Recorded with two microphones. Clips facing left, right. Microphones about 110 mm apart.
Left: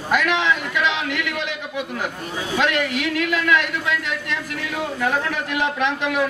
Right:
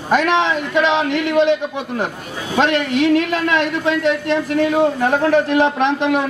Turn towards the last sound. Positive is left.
turn(degrees=-35)  # may be behind; listen again after turning